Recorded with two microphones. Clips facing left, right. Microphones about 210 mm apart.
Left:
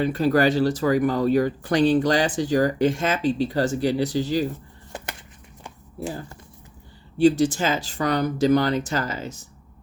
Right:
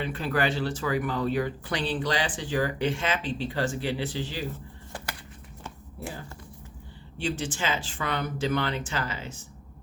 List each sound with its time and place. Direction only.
0.0 s speech: 40° left (ahead or behind)
4.9 s a sound: 20° left (ahead or behind)
7.2 s speech: 40° left (ahead or behind)